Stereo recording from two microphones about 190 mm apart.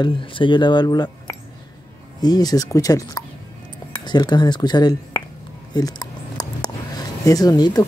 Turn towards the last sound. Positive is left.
turn(degrees=20)  # may be behind; listen again after turning